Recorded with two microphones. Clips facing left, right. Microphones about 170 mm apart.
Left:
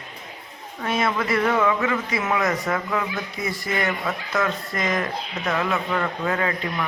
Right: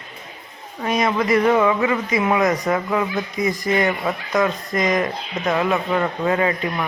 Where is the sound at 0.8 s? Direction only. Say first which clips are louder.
Right 4 dB; 15° right (ahead or behind).